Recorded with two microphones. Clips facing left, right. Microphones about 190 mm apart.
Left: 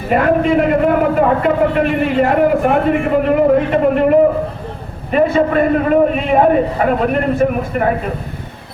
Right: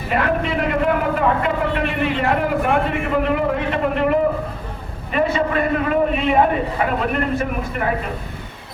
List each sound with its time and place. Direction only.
0.1 s a man's voice: 45° left (ahead or behind)